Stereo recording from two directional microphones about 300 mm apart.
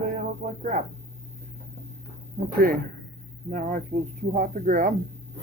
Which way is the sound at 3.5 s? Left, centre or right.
Right.